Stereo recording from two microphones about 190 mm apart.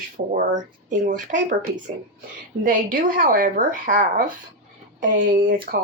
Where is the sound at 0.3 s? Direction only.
45° right (ahead or behind).